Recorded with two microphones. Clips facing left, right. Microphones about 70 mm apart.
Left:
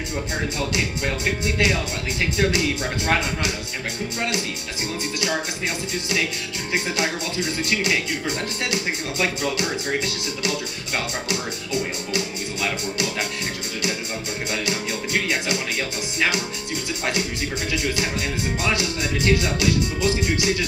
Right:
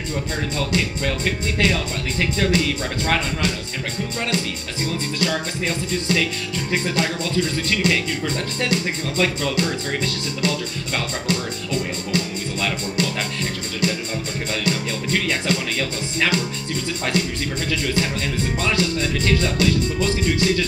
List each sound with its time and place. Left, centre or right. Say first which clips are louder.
0.6 s speech: right 2 dB; centre
6.7 s speech: right 1 dB; centre
14.6 s music: right 2 dB; centre
17.0 s speech: right 2 dB; centre